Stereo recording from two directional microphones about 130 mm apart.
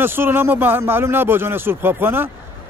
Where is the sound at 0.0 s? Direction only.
15° right (ahead or behind).